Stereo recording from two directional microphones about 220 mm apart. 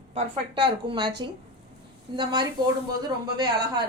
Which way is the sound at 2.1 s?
20° right (ahead or behind).